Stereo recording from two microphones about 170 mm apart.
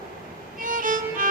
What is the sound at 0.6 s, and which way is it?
Violin, 50° right (ahead or behind).